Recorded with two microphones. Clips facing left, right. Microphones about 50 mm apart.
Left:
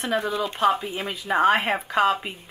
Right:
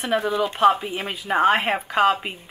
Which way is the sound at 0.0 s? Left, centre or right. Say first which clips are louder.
Right 3 dB; centre.